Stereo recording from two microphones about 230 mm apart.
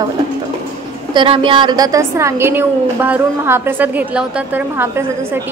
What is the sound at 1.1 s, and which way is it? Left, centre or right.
A woman's voice, right.